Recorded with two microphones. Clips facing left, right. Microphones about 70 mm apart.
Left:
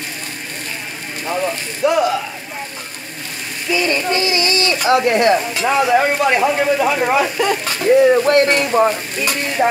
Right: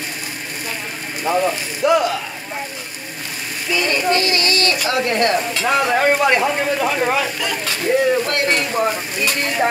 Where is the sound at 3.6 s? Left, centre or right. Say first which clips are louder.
Left 1 dB; centre.